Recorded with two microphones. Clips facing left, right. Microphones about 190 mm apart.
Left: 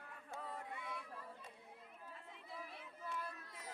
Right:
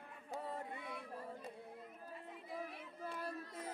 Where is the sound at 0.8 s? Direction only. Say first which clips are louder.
Right 1 dB; 40° right (ahead or behind).